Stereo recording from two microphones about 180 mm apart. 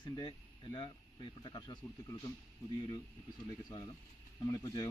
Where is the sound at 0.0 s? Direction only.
25° left (ahead or behind).